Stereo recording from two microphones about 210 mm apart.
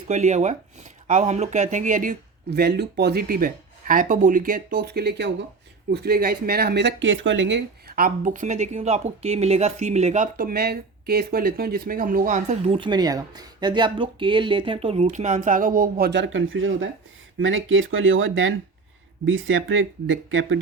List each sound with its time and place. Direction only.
0.1 s speech: 35° right (ahead or behind); by 20.6 s 70° right (ahead or behind)